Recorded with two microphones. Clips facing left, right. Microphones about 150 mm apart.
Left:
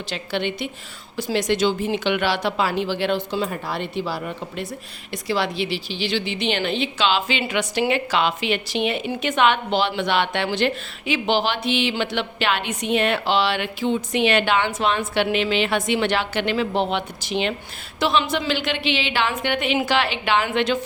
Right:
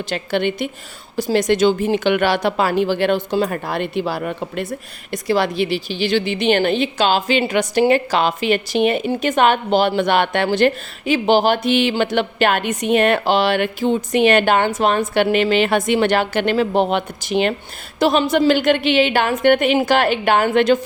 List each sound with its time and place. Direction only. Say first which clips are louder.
0.1 s a woman's voice: right 5 dB; 50° right (ahead or behind)
5.1 s a woman's voice: right 5 dB; 50° right (ahead or behind)